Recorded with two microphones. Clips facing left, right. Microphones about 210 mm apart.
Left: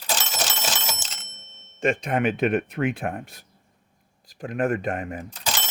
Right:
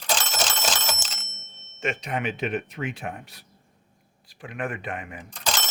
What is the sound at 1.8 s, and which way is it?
Speech, 45° left (ahead or behind).